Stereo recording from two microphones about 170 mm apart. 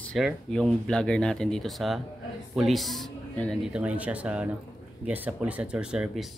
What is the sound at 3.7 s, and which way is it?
Speech, 10° right (ahead or behind).